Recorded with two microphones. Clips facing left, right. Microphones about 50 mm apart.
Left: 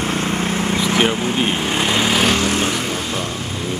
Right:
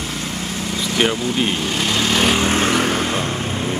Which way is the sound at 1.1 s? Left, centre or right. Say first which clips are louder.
Left 1 dB; left.